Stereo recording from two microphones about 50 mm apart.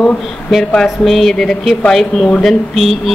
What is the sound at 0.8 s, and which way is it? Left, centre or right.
A woman's voice, centre.